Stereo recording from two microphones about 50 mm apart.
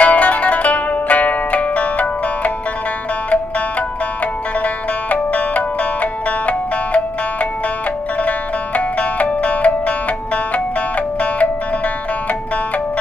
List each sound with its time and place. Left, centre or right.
0.0 s zither: left
5.1 s music: left
8.2 s music: left